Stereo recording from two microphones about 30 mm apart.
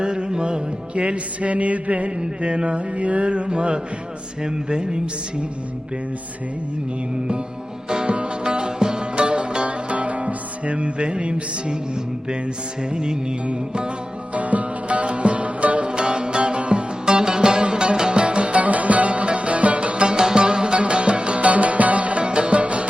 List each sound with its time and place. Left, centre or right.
0.0 s music: right
2.0 s music: right
4.4 s speech: right
7.9 s music: right
9.6 s music: right
12.9 s music: right
14.3 s music: right
15.9 s music: right